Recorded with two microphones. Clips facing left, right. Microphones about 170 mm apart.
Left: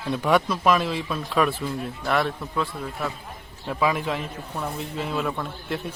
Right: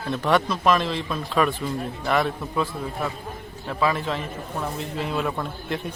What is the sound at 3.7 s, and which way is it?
Speech, 10° left (ahead or behind).